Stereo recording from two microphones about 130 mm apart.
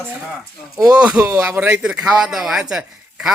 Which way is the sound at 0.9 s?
10° right (ahead or behind).